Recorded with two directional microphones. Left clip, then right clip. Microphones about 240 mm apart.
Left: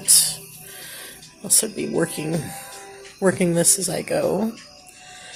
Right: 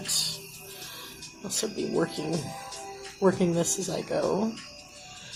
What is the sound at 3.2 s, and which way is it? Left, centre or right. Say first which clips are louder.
Speech: left 5 dB; left.